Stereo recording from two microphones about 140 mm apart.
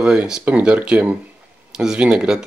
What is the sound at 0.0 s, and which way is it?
Speech, 5° right (ahead or behind).